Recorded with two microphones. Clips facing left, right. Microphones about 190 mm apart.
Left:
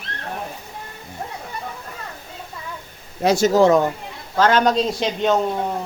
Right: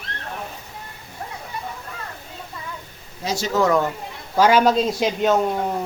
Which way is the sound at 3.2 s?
55° left (ahead or behind).